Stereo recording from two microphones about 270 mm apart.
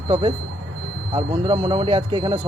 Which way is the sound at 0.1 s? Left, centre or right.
Centre.